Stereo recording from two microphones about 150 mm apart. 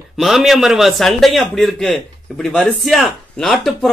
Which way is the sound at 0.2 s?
Centre (ahead or behind).